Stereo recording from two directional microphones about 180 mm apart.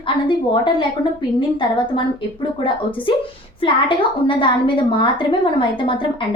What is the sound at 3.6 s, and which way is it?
A woman's voice, 30° left (ahead or behind).